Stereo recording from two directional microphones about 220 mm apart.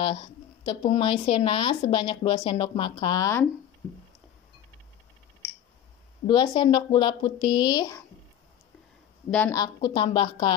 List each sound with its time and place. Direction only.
0.0 s speech: 25° left (ahead or behind)
6.2 s speech: 20° left (ahead or behind)
9.3 s speech: 10° left (ahead or behind)